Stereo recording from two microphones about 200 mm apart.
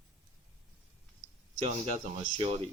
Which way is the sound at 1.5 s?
35° right (ahead or behind).